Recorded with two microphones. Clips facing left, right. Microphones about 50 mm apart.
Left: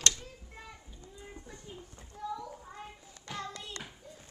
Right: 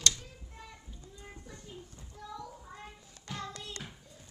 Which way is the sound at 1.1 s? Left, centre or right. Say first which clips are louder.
Left 2 dB; centre.